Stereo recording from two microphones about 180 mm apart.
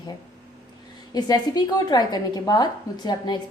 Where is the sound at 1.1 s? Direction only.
20° left (ahead or behind).